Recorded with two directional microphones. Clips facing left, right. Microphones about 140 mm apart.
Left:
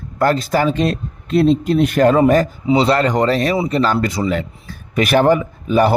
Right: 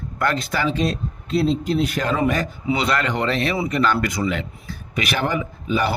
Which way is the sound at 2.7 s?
30° left (ahead or behind).